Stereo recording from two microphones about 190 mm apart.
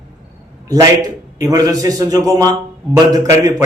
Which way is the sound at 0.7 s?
20° right (ahead or behind).